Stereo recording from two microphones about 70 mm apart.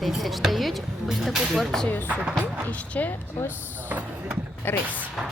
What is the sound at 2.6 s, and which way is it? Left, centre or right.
Speech, left.